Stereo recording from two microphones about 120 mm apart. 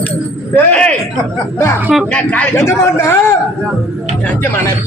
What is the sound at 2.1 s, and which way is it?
Speech, 10° left (ahead or behind).